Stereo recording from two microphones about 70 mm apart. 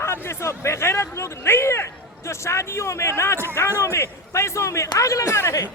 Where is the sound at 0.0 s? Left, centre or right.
Left.